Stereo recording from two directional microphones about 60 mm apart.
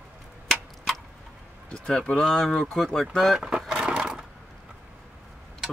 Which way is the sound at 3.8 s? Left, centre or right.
Centre.